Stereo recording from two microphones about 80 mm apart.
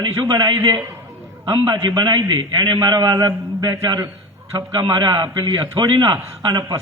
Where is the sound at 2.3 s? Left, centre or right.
Right.